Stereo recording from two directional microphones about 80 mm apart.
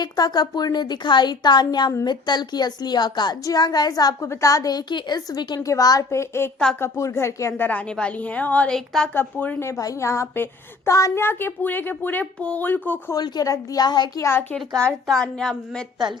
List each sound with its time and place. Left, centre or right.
0.0 s a woman's voice: left
4.2 s a woman's voice: left
4.9 s a woman's voice: left
5.6 s speech: left
7.7 s a woman's voice: centre
8.7 s a woman's voice: centre
9.1 s speech: left
9.6 s speech: left
11.2 s speech: left
13.1 s a woman's voice: left
14.2 s speech: left
15.0 s a woman's voice: centre